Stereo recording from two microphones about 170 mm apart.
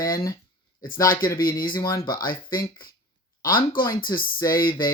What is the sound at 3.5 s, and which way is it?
Speech, 55° left (ahead or behind).